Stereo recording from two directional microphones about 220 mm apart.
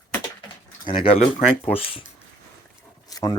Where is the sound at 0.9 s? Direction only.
25° left (ahead or behind).